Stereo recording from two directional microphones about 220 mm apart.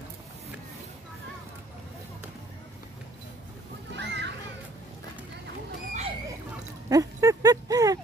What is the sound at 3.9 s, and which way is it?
Children playing, 55° right (ahead or behind).